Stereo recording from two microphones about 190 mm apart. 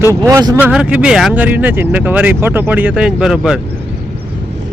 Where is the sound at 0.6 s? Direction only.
10° right (ahead or behind).